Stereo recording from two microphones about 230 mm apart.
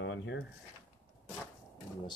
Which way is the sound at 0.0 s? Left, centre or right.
Left.